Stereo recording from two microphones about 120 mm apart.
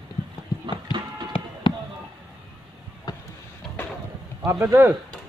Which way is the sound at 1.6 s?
45° left (ahead or behind).